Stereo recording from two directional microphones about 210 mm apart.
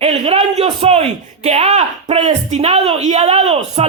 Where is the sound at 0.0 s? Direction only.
30° right (ahead or behind).